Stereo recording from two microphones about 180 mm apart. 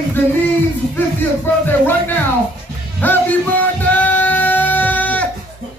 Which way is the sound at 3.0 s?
10° left (ahead or behind).